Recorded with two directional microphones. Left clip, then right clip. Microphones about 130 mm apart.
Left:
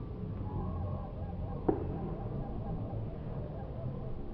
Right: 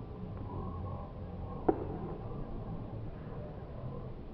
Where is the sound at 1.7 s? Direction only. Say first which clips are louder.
Right 1 dB; 25° right (ahead or behind).